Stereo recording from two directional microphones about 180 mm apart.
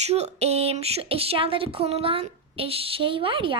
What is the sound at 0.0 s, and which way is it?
Speech, 35° right (ahead or behind).